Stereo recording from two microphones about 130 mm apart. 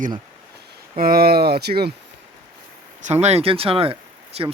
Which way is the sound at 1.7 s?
75° right (ahead or behind).